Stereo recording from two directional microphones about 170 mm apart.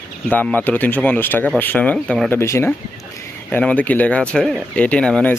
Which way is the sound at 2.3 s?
15° left (ahead or behind).